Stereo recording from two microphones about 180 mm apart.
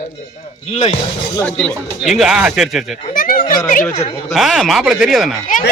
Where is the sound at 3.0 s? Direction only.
50° left (ahead or behind).